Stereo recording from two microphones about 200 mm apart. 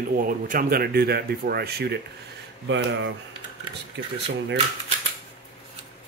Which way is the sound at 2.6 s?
65° right (ahead or behind).